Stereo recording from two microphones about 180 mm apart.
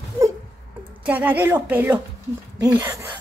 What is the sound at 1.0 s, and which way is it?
A woman's voice, 10° right (ahead or behind).